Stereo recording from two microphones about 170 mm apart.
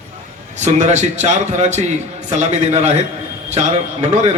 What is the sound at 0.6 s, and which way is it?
A man's voice, 40° right (ahead or behind).